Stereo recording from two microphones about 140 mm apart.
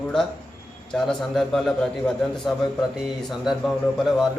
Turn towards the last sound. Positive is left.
turn(degrees=0)  # may be behind; listen again after turning